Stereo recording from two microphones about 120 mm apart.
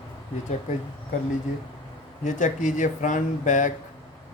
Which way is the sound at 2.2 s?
90° left.